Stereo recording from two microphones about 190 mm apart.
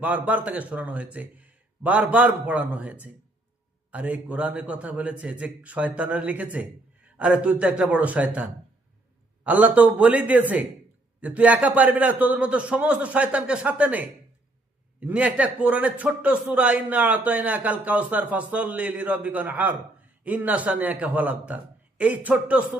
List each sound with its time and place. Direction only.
0.0 s a man's voice: 10° right (ahead or behind)